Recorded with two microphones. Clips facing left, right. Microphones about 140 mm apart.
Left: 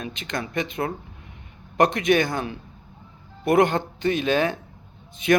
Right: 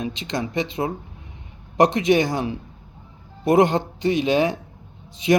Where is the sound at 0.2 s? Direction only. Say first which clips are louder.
Even; 25° right (ahead or behind).